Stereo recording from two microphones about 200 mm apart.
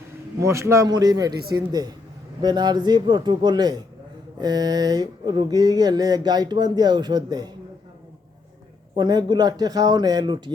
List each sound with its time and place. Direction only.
0.3 s a man's voice: 15° right (ahead or behind)
9.0 s speech: 20° right (ahead or behind)